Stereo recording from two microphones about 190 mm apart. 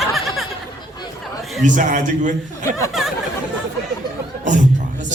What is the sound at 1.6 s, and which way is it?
A man's voice, 40° right (ahead or behind).